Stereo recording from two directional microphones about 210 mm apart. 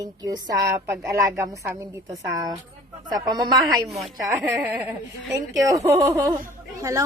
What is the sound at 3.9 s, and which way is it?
A woman's voice, centre (ahead or behind).